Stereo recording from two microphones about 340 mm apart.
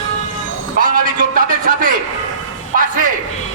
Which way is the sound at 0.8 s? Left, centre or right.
Right.